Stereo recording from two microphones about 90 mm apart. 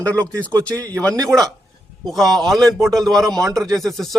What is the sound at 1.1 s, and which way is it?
Speech, 45° right (ahead or behind).